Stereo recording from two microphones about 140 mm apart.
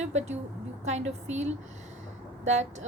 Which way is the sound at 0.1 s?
55° right (ahead or behind).